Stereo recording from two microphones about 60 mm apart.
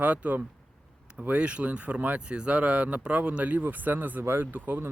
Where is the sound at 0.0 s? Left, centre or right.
Right.